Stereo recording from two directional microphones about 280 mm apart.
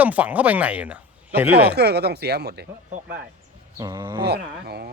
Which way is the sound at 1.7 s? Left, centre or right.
Right.